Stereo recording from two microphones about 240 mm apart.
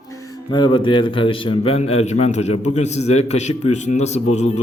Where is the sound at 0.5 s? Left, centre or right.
Centre.